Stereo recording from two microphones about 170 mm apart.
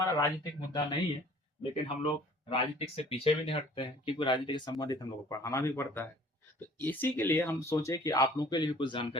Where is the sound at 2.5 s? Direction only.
35° left (ahead or behind).